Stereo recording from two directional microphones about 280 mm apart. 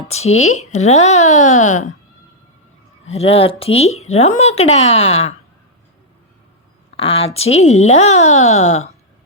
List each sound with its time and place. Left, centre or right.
0.3 s speech: left
0.6 s speech: left
3.1 s speech: left
6.9 s speech: left